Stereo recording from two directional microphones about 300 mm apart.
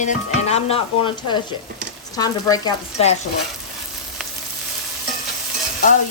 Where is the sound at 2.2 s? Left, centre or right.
Centre.